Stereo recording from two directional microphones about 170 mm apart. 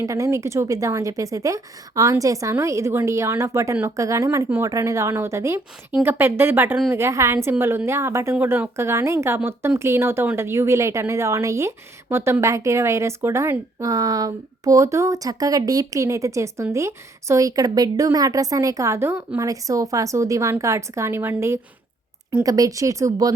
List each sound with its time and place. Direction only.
0.0 s a woman's voice: 20° right (ahead or behind)